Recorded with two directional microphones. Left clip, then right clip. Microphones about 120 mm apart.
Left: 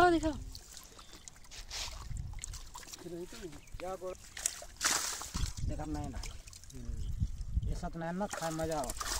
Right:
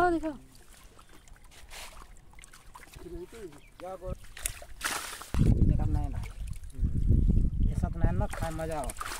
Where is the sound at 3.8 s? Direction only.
65° left (ahead or behind).